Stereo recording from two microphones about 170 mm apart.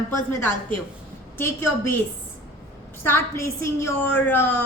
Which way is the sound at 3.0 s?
15° left (ahead or behind).